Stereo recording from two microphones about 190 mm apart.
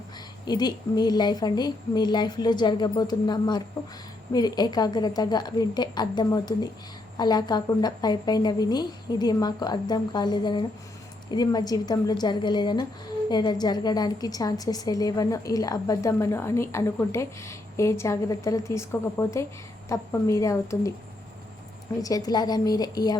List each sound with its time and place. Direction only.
0.4 s a woman's voice: 20° left (ahead or behind)
22.0 s a woman's voice: 20° left (ahead or behind)